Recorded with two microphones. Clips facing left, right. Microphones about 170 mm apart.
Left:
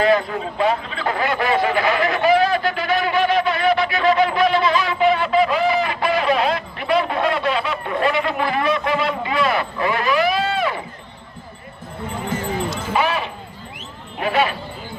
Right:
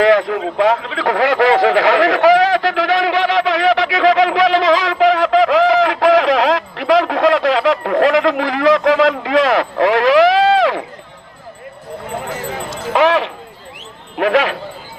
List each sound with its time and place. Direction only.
0.0 s a man's voice: 90° right
12.9 s a sound: 90° right
14.2 s speech: 90° right